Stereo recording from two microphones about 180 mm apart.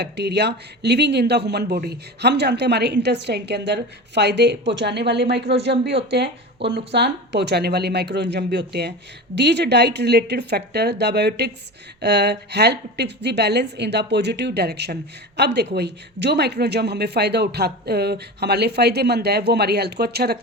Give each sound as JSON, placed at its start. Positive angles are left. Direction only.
{"t": 0.0, "sound": "speech", "side_deg": -65}